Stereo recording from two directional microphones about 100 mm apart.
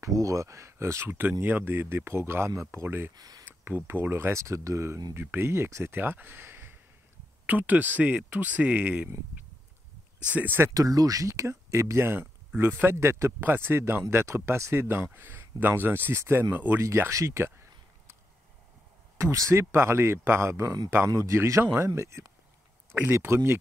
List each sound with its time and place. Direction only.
0.0 s speech: 35° right (ahead or behind)
3.2 s speech: 40° right (ahead or behind)
3.6 s speech: 20° right (ahead or behind)
10.3 s speech: 20° right (ahead or behind)
10.7 s speech: 35° right (ahead or behind)
19.3 s speech: 30° right (ahead or behind)